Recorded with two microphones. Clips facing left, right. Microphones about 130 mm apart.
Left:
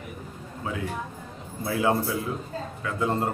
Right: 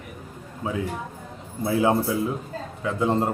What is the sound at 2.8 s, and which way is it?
Speech, 20° right (ahead or behind).